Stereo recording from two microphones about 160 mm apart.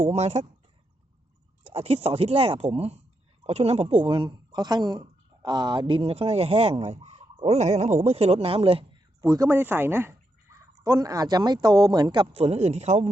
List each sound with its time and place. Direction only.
0.0 s a man's voice: 45° right (ahead or behind)
1.6 s speech: 40° right (ahead or behind)
9.2 s speech: 20° right (ahead or behind)
12.4 s a man's voice: 40° right (ahead or behind)